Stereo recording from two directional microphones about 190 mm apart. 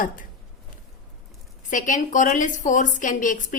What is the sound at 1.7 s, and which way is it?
A woman's voice, 45° left (ahead or behind).